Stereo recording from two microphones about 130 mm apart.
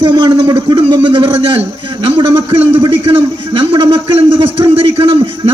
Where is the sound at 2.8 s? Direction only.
40° right (ahead or behind).